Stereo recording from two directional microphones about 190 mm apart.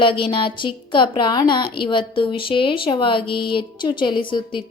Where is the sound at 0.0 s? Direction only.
25° left (ahead or behind).